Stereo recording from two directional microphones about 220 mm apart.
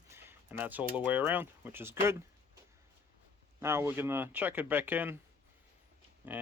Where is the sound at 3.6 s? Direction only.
10° right (ahead or behind).